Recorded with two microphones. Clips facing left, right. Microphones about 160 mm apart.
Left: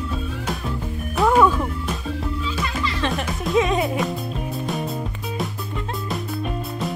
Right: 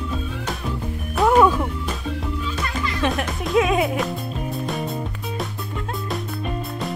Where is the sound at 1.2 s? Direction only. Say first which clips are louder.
Right 1 dB; 5° right (ahead or behind).